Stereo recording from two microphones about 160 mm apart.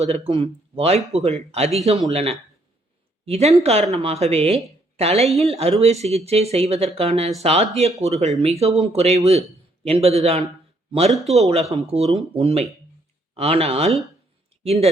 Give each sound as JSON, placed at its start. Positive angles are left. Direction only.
{"t": 0.0, "sound": "speech", "side_deg": -40}